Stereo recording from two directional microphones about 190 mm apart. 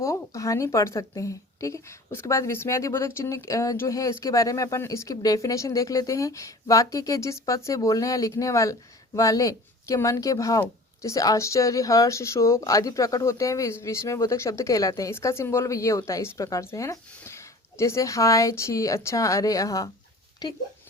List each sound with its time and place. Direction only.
0.0 s speech: 15° left (ahead or behind)